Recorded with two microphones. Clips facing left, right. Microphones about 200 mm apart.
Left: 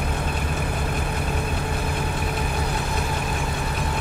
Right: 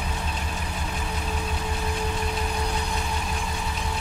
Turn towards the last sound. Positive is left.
turn(degrees=60)  # may be behind; listen again after turning